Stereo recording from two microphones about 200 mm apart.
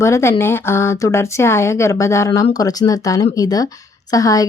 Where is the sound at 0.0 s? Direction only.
15° left (ahead or behind).